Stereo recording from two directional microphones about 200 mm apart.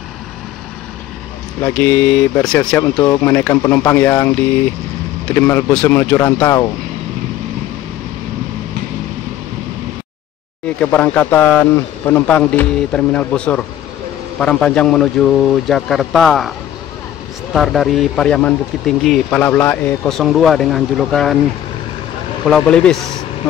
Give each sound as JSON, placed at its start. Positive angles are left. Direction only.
{"t": 1.6, "sound": "a man's voice", "side_deg": 5}
{"t": 2.8, "sound": "speech", "side_deg": 20}
{"t": 3.3, "sound": "a man's voice", "side_deg": 10}
{"t": 10.8, "sound": "a man's voice", "side_deg": 5}
{"t": 17.6, "sound": "speech", "side_deg": 0}
{"t": 22.5, "sound": "speech", "side_deg": 5}